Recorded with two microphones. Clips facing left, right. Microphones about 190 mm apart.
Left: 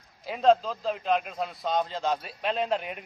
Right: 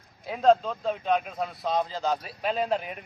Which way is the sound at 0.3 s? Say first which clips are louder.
Right 1 dB; centre (ahead or behind).